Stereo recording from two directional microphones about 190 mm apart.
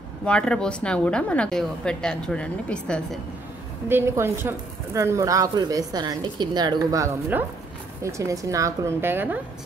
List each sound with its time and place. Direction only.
0.2 s a woman's voice: 5° left (ahead or behind)
3.9 s a woman's voice: 10° right (ahead or behind)